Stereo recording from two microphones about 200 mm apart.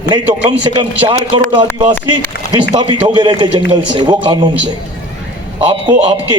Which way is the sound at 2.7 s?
25° right (ahead or behind).